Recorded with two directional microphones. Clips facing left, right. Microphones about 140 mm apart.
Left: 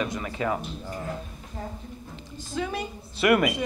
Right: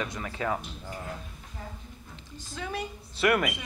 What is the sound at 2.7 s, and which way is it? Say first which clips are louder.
Speech: left 2 dB; 15° left (ahead or behind).